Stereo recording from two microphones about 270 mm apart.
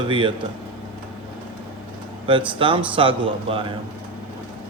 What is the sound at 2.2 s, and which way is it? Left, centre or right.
Speech, centre.